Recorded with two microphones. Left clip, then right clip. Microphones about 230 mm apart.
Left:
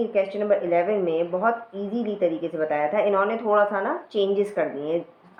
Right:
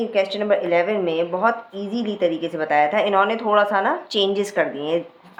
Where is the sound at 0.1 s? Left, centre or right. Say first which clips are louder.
Right 3 dB; centre.